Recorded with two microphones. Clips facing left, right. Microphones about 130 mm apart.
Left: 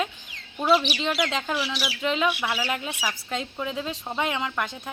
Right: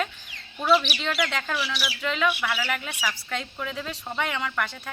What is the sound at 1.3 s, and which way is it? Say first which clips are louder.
Speech: left 2 dB; 20° left (ahead or behind).